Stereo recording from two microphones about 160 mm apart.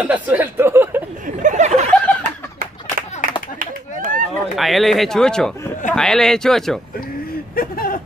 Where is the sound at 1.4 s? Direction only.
50° right (ahead or behind).